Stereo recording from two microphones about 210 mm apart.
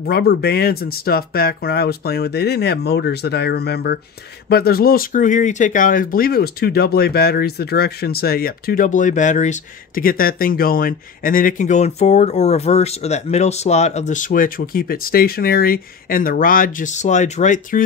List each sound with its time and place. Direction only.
0.0 s speech: 50° left (ahead or behind)